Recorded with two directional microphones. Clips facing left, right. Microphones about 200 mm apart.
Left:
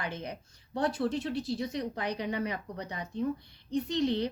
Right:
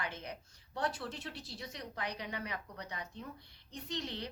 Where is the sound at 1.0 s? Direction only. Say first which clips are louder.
Left 13 dB; 40° left (ahead or behind).